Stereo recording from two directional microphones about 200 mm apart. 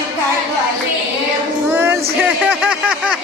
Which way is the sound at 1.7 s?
10° right (ahead or behind).